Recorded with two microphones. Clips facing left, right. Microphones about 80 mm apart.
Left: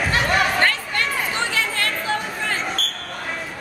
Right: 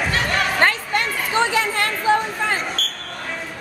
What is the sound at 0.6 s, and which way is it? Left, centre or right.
Chatter, right.